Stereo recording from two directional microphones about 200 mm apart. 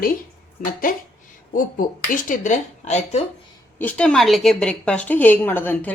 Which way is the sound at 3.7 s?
5° left (ahead or behind).